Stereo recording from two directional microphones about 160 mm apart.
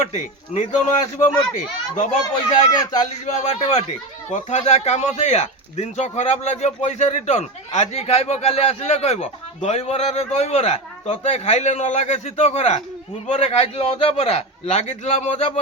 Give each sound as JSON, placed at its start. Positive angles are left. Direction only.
{"t": 0.0, "sound": "speech", "side_deg": 45}
{"t": 3.2, "sound": "speech", "side_deg": 40}